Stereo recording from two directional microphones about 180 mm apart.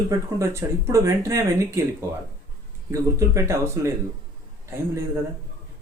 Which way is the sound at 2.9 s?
15° right (ahead or behind).